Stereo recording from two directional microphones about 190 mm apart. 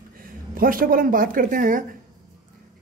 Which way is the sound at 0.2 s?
50° right (ahead or behind).